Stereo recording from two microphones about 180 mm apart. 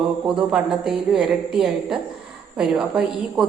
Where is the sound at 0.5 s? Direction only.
5° right (ahead or behind).